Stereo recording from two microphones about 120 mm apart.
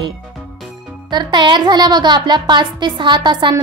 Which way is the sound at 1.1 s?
40° right (ahead or behind).